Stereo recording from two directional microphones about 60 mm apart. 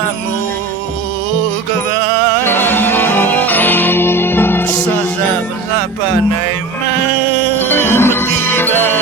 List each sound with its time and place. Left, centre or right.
2.5 s music: left
7.6 s music: left